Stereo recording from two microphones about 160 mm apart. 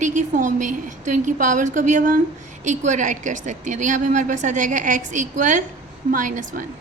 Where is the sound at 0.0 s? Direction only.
50° right (ahead or behind).